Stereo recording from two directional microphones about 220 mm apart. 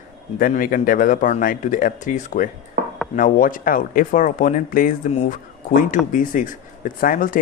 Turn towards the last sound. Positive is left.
turn(degrees=40)  # may be behind; listen again after turning